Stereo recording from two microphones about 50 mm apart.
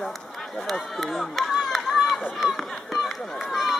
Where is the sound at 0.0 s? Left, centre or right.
Centre.